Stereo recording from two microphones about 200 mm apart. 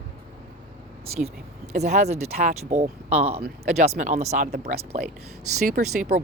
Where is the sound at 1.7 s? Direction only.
35° right (ahead or behind).